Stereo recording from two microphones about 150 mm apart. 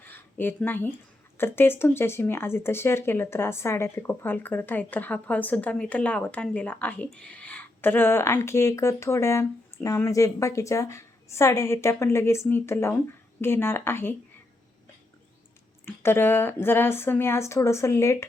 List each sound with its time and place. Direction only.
0.0 s a sound: 15° left (ahead or behind)
1.4 s speech: 15° left (ahead or behind)
15.9 s speech: 15° left (ahead or behind)